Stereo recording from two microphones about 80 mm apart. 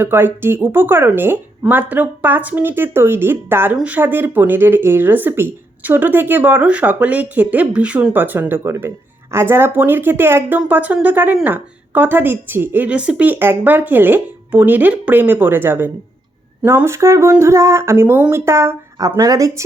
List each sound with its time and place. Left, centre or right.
0.0 s speech: right
18.9 s speech: right